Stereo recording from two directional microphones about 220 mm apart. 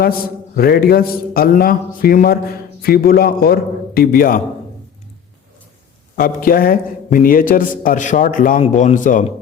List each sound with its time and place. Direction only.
0.0 s a man's voice: 45° left (ahead or behind)
6.1 s a man's voice: 40° left (ahead or behind)